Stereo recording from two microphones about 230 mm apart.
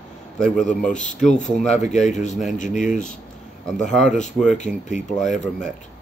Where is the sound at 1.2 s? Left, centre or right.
Left.